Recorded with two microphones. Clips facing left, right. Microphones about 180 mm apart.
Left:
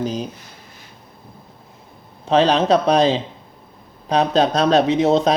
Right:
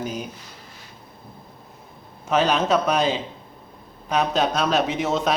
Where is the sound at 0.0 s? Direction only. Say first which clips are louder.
Left 6 dB; 30° left (ahead or behind).